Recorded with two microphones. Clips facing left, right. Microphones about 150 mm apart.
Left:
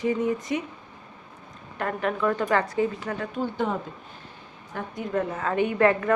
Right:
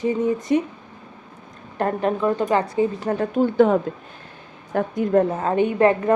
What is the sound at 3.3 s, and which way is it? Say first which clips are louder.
A woman's voice: right 12 dB; 60° right (ahead or behind).